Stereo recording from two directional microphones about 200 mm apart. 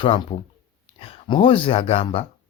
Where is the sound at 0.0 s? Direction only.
25° left (ahead or behind).